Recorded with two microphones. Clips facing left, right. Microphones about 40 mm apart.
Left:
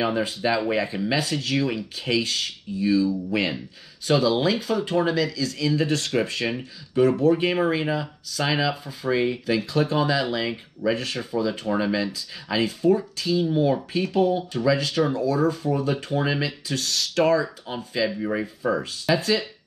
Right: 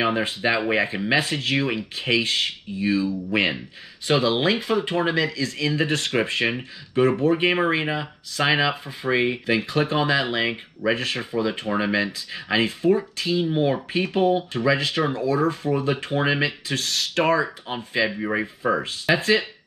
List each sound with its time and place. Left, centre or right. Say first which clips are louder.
0.0 s speech: right 1 dB; right